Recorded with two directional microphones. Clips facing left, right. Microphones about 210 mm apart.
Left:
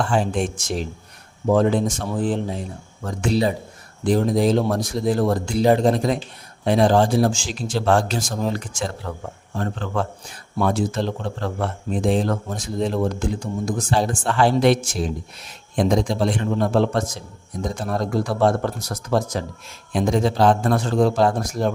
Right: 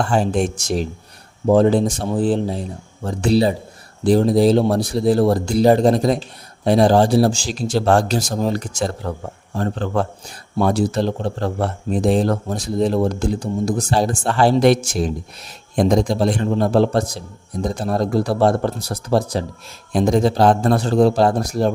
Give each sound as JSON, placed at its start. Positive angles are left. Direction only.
{"t": 0.0, "sound": "a man's voice", "side_deg": -40}